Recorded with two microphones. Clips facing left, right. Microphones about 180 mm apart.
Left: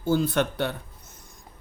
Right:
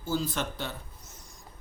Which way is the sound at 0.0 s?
60° left (ahead or behind).